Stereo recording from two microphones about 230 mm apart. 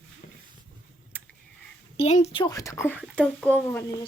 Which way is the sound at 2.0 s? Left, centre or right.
Left.